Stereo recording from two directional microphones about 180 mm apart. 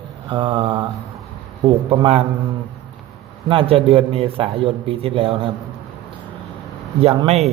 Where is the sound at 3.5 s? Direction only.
30° right (ahead or behind).